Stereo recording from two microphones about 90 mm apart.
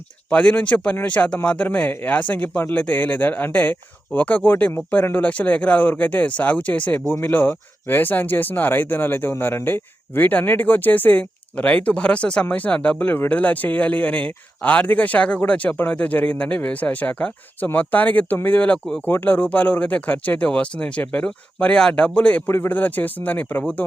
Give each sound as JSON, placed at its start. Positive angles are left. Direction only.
{"t": 0.3, "sound": "speech", "side_deg": 15}
{"t": 22.4, "sound": "a man's voice", "side_deg": 25}